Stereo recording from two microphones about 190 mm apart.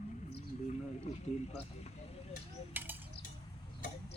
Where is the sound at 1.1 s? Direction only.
35° left (ahead or behind).